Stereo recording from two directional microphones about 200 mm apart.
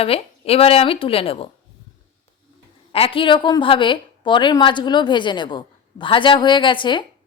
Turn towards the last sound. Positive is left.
turn(degrees=25)  # may be behind; listen again after turning